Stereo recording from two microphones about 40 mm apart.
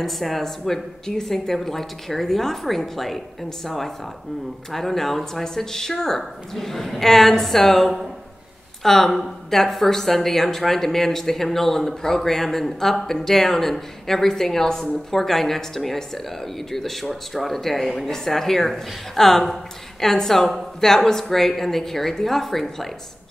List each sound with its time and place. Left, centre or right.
0.0 s a woman's voice: centre